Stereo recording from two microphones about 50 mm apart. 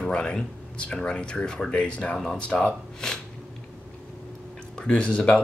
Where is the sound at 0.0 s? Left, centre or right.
Centre.